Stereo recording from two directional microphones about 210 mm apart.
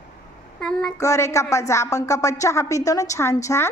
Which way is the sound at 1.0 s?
15° left (ahead or behind).